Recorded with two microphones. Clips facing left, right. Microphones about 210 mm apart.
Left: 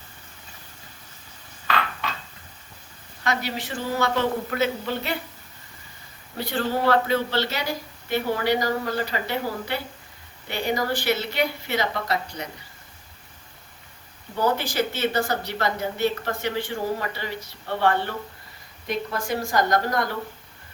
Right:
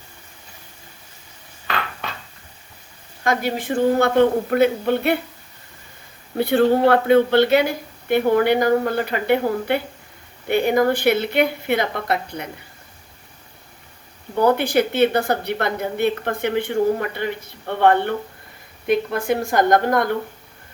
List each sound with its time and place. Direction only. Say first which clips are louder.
3.2 s speech: right 6 dB; 50° right (ahead or behind)
6.3 s speech: right 10 dB; 60° right (ahead or behind)
14.3 s speech: right 7 dB; 60° right (ahead or behind)